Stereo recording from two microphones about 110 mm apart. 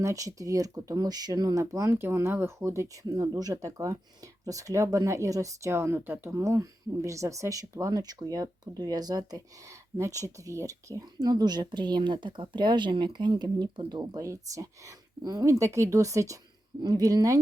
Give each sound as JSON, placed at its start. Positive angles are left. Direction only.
{"t": 0.0, "sound": "speech", "side_deg": -30}